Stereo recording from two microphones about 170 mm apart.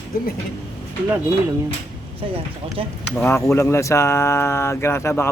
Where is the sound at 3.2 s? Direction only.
15° left (ahead or behind).